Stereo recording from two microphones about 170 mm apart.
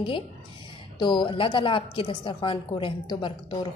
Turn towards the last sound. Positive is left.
turn(degrees=30)  # may be behind; listen again after turning